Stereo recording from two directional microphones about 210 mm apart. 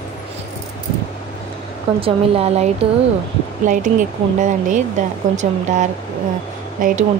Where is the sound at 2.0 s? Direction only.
30° right (ahead or behind).